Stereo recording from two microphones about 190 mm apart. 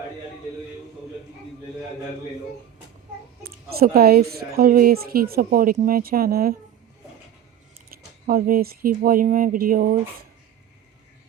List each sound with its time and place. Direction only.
3.4 s speech: 50° right (ahead or behind)
7.9 s speech: 50° right (ahead or behind)